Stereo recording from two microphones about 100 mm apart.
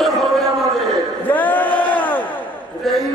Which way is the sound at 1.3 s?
15° left (ahead or behind).